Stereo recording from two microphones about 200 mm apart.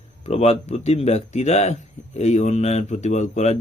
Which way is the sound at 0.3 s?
30° left (ahead or behind).